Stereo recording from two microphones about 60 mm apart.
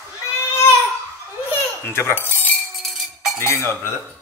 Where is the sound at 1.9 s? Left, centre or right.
Left.